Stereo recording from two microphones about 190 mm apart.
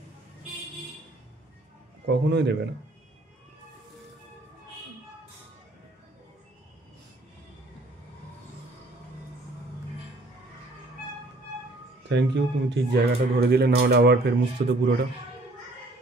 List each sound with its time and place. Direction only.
2.0 s speech: 65° right (ahead or behind)
12.1 s speech: 65° right (ahead or behind)